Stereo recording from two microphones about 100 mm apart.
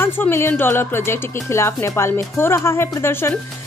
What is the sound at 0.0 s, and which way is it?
Speech, 25° left (ahead or behind).